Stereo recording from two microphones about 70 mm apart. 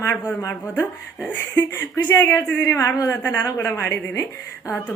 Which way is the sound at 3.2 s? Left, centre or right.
Left.